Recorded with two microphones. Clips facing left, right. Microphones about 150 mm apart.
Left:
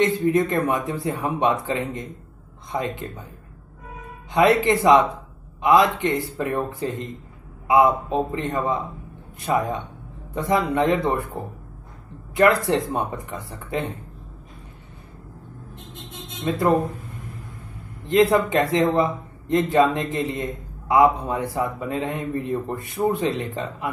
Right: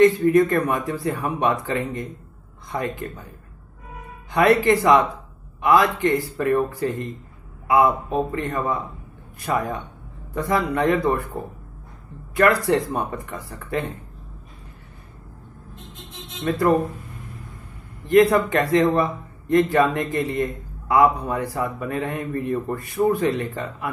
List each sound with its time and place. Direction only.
0.0 s a man's voice: 25° left (ahead or behind)
4.3 s a man's voice: 20° left (ahead or behind)
12.4 s a man's voice: 20° left (ahead or behind)
16.4 s a man's voice: 20° left (ahead or behind)
18.0 s a man's voice: 20° left (ahead or behind)